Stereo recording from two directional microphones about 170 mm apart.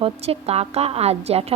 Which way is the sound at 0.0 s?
35° right (ahead or behind).